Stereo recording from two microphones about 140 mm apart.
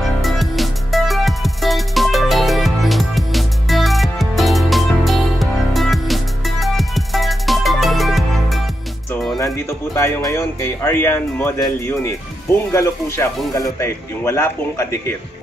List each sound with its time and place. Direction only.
0.2 s music: centre (ahead or behind)
9.4 s speech: 20° left (ahead or behind)
12.7 s a man's voice: 20° left (ahead or behind)